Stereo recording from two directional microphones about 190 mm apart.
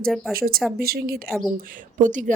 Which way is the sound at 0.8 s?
55° right (ahead or behind).